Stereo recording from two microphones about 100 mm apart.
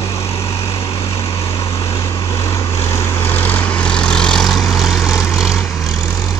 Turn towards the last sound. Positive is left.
turn(degrees=-5)  # may be behind; listen again after turning